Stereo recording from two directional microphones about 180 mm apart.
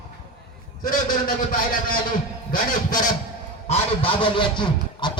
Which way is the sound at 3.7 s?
30° left (ahead or behind).